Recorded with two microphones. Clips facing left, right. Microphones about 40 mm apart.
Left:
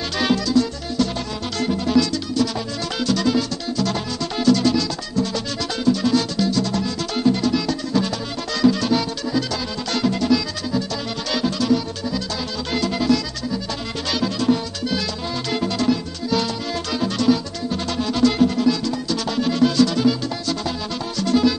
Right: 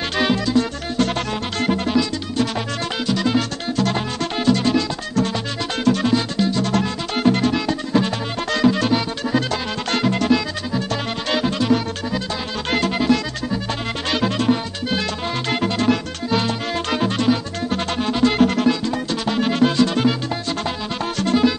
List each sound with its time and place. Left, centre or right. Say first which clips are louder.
0.5 s music: even; right
2.0 s music: left 1 dB; right
3.3 s music: right 1 dB; right
6.0 s music: even; right
6.7 s music: right 2 dB; right
12.7 s music: right 1 dB; right
18.4 s music: right 1 dB; right
18.7 s music: right 1 dB; right
21.3 s music: even; right